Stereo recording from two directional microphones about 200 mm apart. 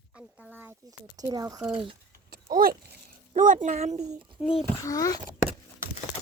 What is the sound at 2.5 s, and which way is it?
Speech, 45° right (ahead or behind).